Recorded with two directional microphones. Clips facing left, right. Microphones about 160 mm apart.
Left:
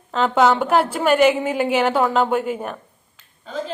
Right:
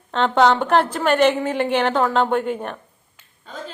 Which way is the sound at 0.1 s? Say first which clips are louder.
Even; 5° left (ahead or behind).